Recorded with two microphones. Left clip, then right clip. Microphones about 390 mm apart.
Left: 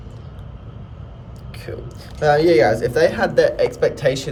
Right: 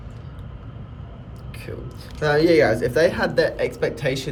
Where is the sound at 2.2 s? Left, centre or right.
Centre.